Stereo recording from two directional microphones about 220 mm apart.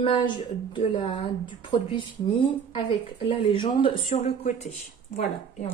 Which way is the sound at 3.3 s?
25° left (ahead or behind).